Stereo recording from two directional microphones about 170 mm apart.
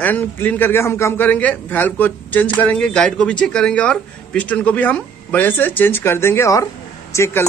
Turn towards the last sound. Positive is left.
turn(degrees=15)  # may be behind; listen again after turning